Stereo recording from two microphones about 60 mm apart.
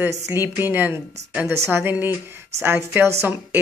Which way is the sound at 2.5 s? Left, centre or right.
Right.